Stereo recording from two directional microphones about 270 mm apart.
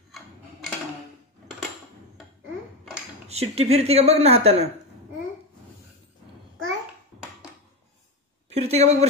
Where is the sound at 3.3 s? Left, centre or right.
Right.